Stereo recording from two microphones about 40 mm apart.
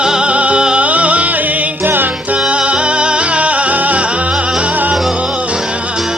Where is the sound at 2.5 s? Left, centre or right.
Right.